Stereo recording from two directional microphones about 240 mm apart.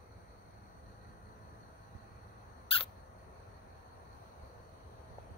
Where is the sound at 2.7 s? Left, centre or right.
Left.